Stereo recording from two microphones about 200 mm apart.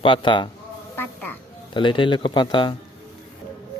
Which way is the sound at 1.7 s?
25° left (ahead or behind).